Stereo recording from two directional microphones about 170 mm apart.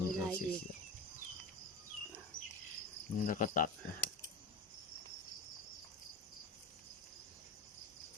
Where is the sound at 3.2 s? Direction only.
50° left (ahead or behind).